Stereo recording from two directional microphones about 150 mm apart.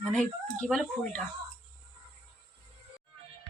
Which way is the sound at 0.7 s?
5° left (ahead or behind).